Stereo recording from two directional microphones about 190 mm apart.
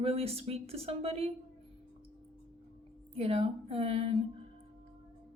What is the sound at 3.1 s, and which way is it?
A woman's voice, 30° right (ahead or behind).